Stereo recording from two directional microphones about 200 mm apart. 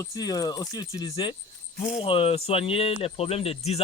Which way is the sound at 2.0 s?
25° left (ahead or behind).